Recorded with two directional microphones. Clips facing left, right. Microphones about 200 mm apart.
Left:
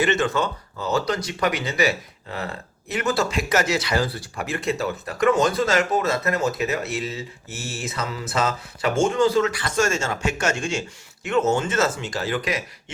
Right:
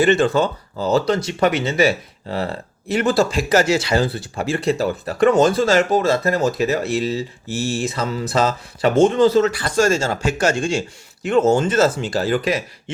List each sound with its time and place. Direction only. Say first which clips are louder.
0.0 s speech: right 6 dB; 35° right (ahead or behind)